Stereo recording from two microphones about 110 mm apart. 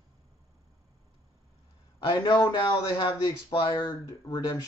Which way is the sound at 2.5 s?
40° left (ahead or behind).